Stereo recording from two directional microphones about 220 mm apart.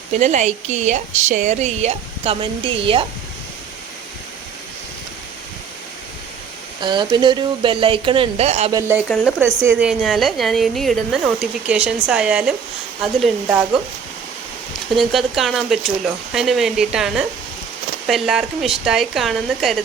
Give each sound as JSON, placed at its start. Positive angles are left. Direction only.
{"t": 0.2, "sound": "speech", "side_deg": -30}
{"t": 6.8, "sound": "speech", "side_deg": -20}
{"t": 9.0, "sound": "a woman's voice", "side_deg": 5}
{"t": 9.4, "sound": "a woman's voice", "side_deg": -5}
{"t": 14.9, "sound": "a woman's voice", "side_deg": 0}